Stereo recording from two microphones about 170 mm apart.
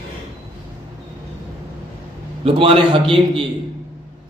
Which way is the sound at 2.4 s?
30° right (ahead or behind).